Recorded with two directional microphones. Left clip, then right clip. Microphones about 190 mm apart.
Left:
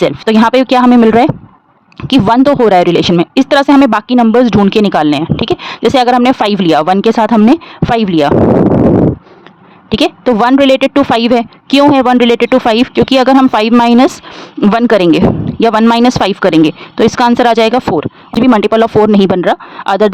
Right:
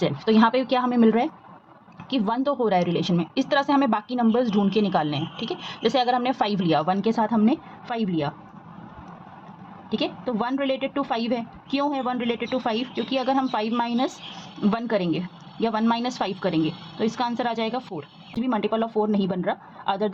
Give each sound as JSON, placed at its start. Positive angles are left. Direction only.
{"t": 0.0, "sound": "speech", "side_deg": 45}
{"t": 9.9, "sound": "speech", "side_deg": 50}